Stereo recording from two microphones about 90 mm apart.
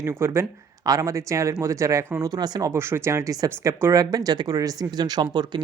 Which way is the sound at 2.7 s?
30° right (ahead or behind).